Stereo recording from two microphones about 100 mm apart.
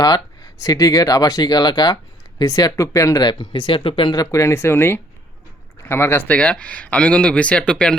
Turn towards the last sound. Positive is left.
turn(degrees=10)  # may be behind; listen again after turning